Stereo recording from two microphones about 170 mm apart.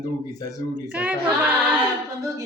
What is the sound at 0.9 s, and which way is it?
A capella, 5° right (ahead or behind).